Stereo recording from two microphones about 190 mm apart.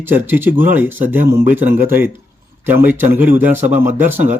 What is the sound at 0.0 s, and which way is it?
Speech, 10° right (ahead or behind).